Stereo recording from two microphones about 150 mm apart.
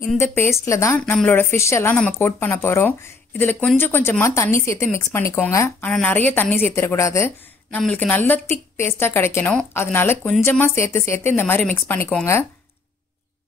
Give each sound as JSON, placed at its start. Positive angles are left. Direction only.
{"t": 0.2, "sound": "a woman's voice", "side_deg": 15}